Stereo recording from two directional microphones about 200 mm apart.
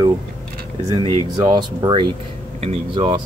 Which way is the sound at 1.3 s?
20° right (ahead or behind).